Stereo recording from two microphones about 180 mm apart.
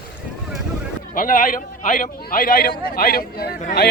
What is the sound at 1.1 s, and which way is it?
A man's voice, 50° left (ahead or behind).